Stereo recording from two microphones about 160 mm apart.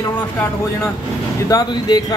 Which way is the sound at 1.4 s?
25° left (ahead or behind).